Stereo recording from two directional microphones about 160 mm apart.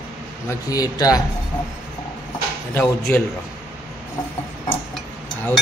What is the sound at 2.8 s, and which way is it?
Speech, 15° left (ahead or behind).